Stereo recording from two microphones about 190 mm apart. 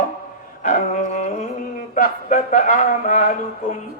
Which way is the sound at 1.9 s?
45° left (ahead or behind).